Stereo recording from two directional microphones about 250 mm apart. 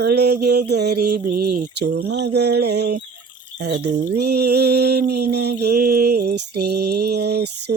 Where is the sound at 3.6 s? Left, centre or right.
Right.